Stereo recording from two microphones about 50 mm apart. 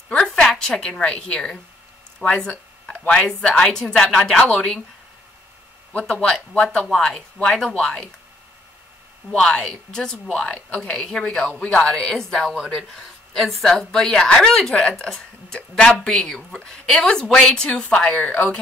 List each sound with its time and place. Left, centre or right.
0.2 s a woman's voice: centre
5.9 s speech: left
9.3 s a woman's voice: centre